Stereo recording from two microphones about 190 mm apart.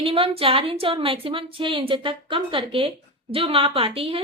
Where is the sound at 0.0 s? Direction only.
30° right (ahead or behind).